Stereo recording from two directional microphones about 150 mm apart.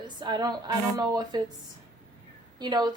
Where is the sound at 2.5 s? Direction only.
30° right (ahead or behind).